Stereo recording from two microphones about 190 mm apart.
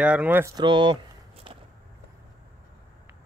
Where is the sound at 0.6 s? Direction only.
25° right (ahead or behind).